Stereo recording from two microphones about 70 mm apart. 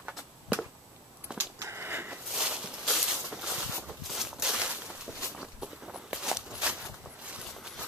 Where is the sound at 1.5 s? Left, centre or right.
Right.